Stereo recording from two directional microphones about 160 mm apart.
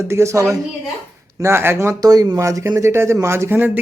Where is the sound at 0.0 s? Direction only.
15° right (ahead or behind).